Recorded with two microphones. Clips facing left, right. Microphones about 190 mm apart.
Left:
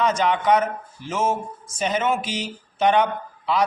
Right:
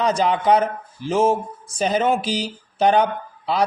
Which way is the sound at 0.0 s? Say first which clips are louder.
Right 2 dB; 35° right (ahead or behind).